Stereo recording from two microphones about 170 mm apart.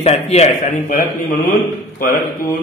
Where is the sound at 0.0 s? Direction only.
40° left (ahead or behind).